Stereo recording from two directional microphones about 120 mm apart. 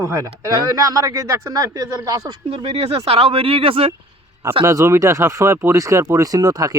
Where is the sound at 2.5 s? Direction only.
55° right (ahead or behind).